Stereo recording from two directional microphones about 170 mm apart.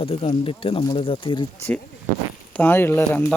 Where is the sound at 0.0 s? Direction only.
35° left (ahead or behind).